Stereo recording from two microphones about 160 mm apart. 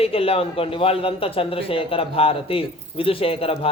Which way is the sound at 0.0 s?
35° left (ahead or behind).